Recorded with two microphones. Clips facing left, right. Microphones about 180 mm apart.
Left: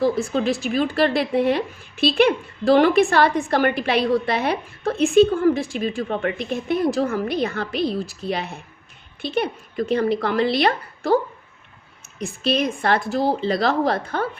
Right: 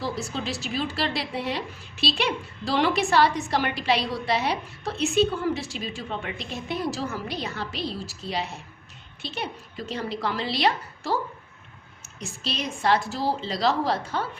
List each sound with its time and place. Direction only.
0.0 s a woman's voice: 55° left (ahead or behind)
12.2 s a woman's voice: 55° left (ahead or behind)